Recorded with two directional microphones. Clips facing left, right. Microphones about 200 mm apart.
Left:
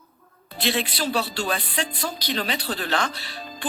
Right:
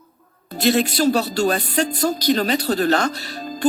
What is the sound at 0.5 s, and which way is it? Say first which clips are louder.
Speech: right 8 dB; 40° right (ahead or behind).